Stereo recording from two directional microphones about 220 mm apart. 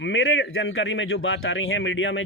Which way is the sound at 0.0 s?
60° left (ahead or behind).